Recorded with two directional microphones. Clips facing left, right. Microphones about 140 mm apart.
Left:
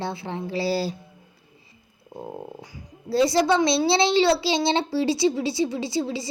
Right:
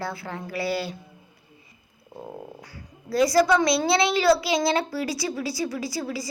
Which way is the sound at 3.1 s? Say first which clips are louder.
Even; 25° left (ahead or behind).